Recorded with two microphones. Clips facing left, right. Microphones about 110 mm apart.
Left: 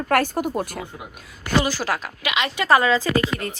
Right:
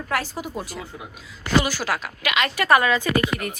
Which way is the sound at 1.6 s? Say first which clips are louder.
Left 1 dB; 30° left (ahead or behind).